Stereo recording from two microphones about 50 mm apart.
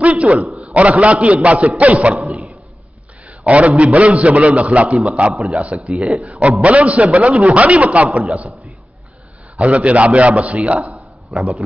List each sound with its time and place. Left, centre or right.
0.0 s a sound: right
0.7 s a man's voice: right
3.3 s a man's voice: right
5.9 s speech: centre
6.6 s a man's voice: right
9.6 s a man's voice: right
11.3 s speech: centre